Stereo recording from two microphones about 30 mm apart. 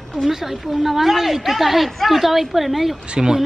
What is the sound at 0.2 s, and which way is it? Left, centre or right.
A woman's voice, centre.